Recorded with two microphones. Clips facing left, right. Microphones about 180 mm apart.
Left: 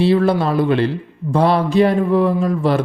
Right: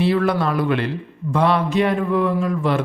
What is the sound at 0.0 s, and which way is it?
Speech, 30° left (ahead or behind).